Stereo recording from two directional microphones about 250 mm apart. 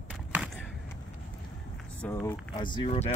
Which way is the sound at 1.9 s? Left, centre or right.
Centre.